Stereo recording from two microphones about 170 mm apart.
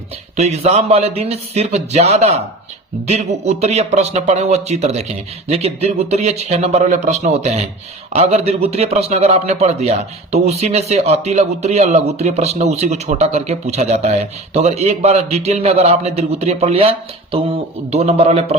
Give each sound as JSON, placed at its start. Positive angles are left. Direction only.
{"t": 0.3, "sound": "a man's voice", "side_deg": -40}
{"t": 17.9, "sound": "a man's voice", "side_deg": -40}